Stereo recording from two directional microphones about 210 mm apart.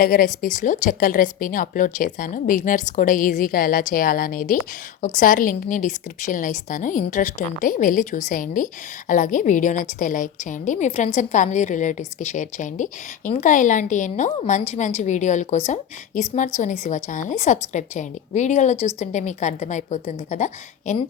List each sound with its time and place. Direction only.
0.0 s a woman's voice: 40° left (ahead or behind)